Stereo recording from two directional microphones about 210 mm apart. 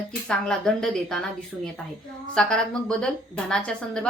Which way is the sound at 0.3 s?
5° left (ahead or behind).